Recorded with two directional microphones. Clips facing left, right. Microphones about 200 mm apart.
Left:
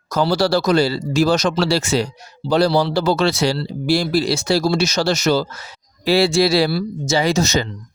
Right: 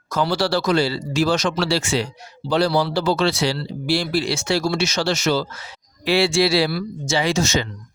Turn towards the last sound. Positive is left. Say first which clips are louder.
# left 3 dB
turn(degrees=40)  # may be behind; listen again after turning